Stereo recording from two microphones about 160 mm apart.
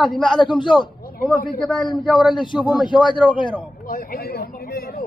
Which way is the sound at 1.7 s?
30° left (ahead or behind).